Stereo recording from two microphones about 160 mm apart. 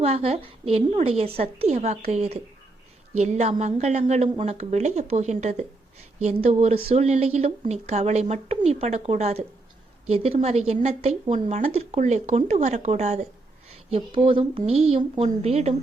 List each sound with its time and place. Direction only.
0.0 s a woman's voice: 40° right (ahead or behind)
14.2 s speech: 35° right (ahead or behind)